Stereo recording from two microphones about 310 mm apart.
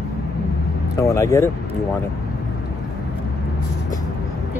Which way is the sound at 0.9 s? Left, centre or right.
Centre.